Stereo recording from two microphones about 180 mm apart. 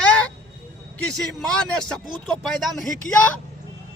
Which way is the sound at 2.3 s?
Centre (ahead or behind).